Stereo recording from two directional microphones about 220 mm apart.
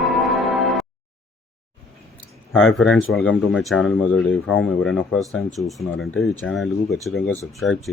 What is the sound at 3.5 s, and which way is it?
Speech, centre (ahead or behind).